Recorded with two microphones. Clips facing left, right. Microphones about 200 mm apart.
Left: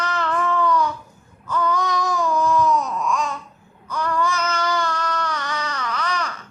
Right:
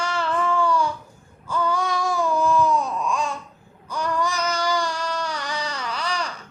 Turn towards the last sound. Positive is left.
turn(degrees=-30)  # may be behind; listen again after turning